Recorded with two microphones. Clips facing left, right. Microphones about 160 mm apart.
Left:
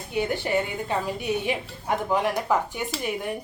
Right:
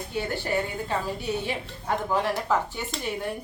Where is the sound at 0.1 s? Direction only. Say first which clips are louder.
Left 4 dB; 15° left (ahead or behind).